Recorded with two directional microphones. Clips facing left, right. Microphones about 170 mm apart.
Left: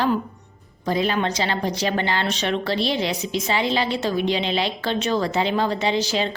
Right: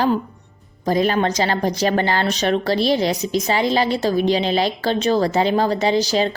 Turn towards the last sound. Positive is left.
turn(degrees=-40)  # may be behind; listen again after turning